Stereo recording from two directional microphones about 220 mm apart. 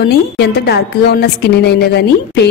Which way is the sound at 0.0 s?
45° left (ahead or behind).